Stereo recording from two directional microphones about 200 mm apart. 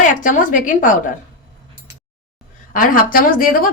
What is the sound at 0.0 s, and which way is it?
A woman's voice, 40° left (ahead or behind).